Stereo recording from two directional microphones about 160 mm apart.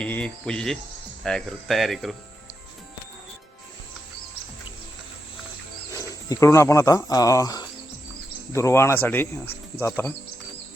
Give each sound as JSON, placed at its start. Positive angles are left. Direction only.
{"t": 0.0, "sound": "cricket", "side_deg": 5}
{"t": 1.2, "sound": "speech", "side_deg": 5}
{"t": 5.9, "sound": "speech", "side_deg": 20}